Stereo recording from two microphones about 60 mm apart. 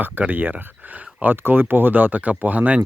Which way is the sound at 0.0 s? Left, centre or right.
Right.